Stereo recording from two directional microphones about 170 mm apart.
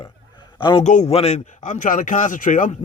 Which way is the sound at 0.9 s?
40° left (ahead or behind).